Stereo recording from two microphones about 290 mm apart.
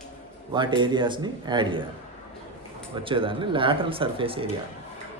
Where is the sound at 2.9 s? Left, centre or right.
Centre.